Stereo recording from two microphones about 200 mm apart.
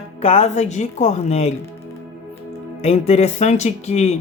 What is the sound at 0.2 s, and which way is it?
Speech, 30° left (ahead or behind).